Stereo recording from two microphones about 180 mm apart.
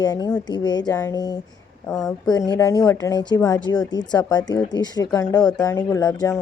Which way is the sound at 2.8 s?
15° left (ahead or behind).